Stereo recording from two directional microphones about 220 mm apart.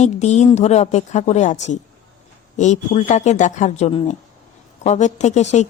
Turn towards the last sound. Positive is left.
turn(degrees=30)  # may be behind; listen again after turning